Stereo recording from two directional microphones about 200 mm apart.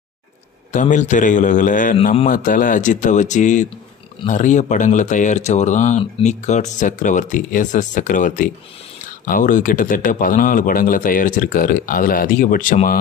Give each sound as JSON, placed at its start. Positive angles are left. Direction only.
{"t": 0.7, "sound": "a man's voice", "side_deg": 40}